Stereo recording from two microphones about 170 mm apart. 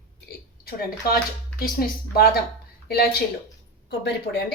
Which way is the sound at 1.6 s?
60° left (ahead or behind).